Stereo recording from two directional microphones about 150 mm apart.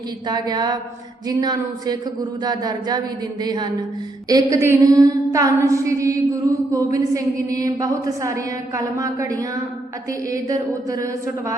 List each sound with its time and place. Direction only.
0.3 s a woman's voice: 25° right (ahead or behind)